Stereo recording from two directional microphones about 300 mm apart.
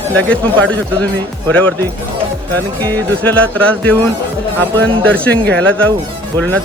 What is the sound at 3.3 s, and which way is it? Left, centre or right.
Speech, centre.